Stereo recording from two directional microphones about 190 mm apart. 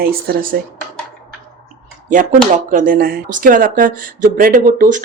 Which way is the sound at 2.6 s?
45° right (ahead or behind).